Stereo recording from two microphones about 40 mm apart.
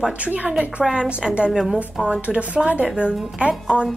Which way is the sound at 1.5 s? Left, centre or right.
Centre.